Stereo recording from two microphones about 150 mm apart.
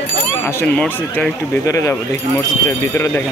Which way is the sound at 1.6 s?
20° left (ahead or behind).